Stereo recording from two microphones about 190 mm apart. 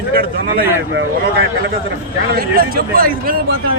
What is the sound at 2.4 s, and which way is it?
Speech, 50° right (ahead or behind).